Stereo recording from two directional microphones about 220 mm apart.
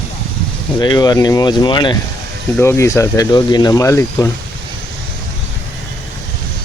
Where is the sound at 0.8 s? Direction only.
20° left (ahead or behind).